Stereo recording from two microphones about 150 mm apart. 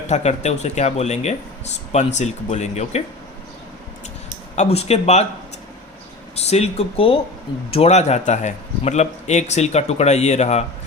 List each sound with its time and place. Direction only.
0.1 s speech: 50° left (ahead or behind)
4.5 s speech: 45° left (ahead or behind)
6.3 s speech: 45° left (ahead or behind)